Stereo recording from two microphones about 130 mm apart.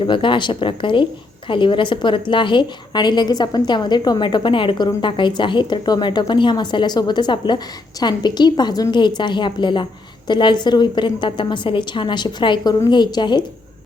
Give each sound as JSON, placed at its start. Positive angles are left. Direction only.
{"t": 0.0, "sound": "speech", "side_deg": 40}